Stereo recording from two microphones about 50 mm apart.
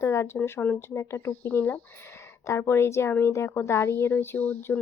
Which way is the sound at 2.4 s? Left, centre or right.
Left.